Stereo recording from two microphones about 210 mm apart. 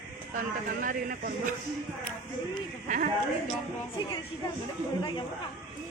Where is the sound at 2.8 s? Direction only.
40° right (ahead or behind).